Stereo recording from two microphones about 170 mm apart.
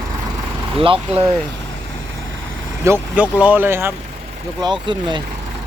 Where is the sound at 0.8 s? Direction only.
30° right (ahead or behind).